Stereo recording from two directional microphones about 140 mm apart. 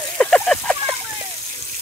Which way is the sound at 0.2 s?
5° left (ahead or behind).